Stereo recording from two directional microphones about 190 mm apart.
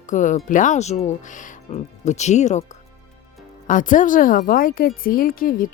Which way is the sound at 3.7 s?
45° left (ahead or behind).